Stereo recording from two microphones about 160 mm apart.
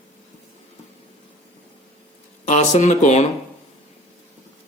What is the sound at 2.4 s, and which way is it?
Speech, 45° left (ahead or behind).